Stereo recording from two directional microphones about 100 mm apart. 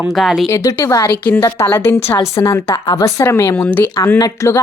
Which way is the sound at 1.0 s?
20° left (ahead or behind).